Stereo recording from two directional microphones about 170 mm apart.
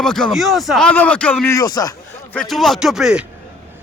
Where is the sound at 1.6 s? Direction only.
20° left (ahead or behind).